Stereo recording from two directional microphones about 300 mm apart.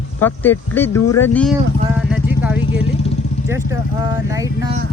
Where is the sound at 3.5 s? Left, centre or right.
Centre.